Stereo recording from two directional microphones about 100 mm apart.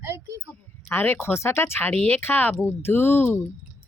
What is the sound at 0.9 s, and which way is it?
Speech, 20° left (ahead or behind).